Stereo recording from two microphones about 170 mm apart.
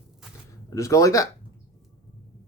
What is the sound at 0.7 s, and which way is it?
Speech, 20° left (ahead or behind).